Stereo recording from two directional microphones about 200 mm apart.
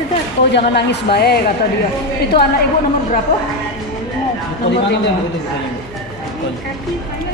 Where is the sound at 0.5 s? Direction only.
55° left (ahead or behind).